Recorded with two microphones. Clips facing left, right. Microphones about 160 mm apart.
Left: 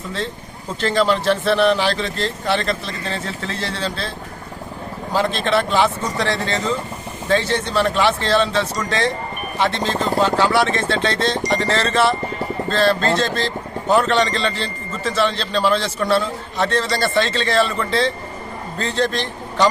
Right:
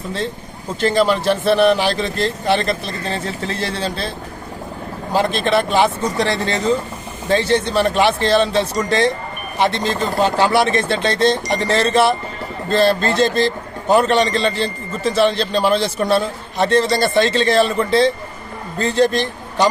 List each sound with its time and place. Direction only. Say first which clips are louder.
0.8 s a man's voice: right 2 dB; 15° right (ahead or behind)
5.1 s a man's voice: right 2 dB; 15° right (ahead or behind)